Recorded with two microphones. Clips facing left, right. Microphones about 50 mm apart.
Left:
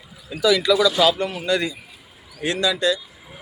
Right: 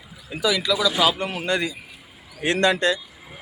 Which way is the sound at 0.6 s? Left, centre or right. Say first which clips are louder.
Left 2 dB; centre.